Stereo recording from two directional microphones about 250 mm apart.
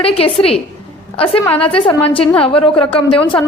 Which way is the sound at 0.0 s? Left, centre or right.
Left.